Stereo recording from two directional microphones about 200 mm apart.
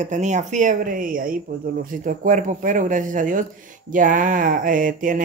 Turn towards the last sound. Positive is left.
turn(degrees=-40)  # may be behind; listen again after turning